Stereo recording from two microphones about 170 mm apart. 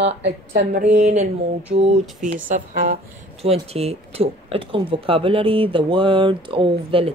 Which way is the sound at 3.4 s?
35° right (ahead or behind).